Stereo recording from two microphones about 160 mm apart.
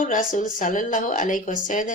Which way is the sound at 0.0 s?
55° left (ahead or behind).